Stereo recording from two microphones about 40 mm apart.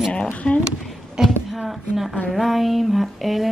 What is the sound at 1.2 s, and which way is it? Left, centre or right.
Speech, centre.